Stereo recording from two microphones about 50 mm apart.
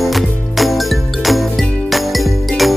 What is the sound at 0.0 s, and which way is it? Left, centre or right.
Music, centre.